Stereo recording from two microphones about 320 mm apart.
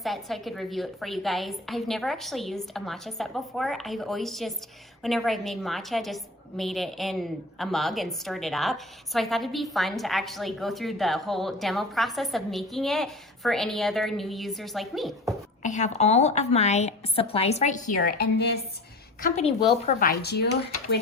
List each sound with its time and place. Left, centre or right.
0.0 s a woman's voice: centre
15.6 s a woman's voice: left
19.2 s a woman's voice: centre